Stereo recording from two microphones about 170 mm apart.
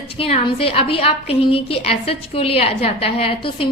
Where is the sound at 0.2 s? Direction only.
35° left (ahead or behind).